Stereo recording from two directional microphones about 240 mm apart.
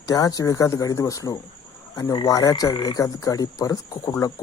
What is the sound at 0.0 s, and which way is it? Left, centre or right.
Speech, centre.